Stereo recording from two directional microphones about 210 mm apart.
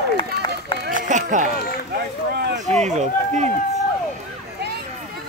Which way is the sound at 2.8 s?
35° right (ahead or behind).